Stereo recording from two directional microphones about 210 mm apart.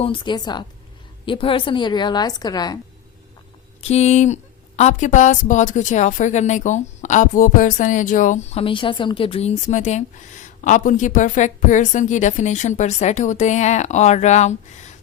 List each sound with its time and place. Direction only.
0.0 s a woman's voice: 25° left (ahead or behind)
3.8 s a woman's voice: 30° left (ahead or behind)